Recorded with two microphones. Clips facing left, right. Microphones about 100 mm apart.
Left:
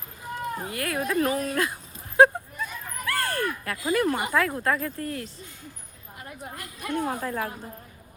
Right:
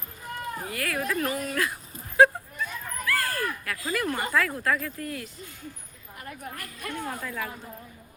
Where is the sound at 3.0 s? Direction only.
30° left (ahead or behind).